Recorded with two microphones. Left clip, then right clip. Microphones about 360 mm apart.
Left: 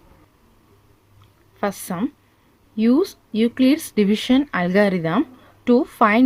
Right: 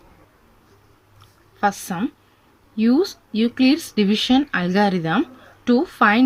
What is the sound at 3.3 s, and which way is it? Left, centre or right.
Speech, left.